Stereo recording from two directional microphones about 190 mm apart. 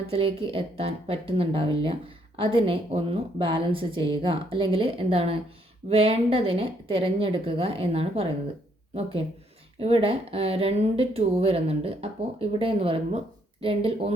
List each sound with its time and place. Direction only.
0.1 s speech: 30° right (ahead or behind)